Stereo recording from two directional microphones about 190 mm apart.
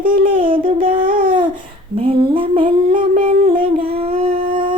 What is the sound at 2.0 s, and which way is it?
Humming, 30° right (ahead or behind).